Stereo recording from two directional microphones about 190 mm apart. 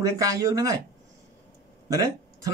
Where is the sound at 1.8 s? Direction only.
15° right (ahead or behind).